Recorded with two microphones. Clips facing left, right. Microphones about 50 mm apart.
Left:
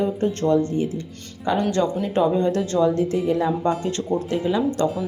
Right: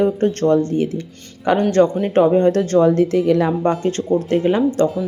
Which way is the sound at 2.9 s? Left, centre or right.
Right.